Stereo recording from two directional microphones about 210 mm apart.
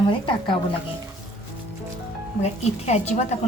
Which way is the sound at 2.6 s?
30° left (ahead or behind).